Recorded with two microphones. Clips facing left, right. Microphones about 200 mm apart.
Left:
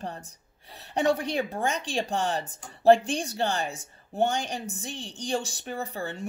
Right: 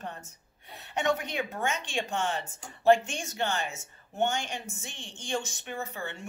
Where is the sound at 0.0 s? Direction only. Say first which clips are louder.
Left 4 dB; 35° left (ahead or behind).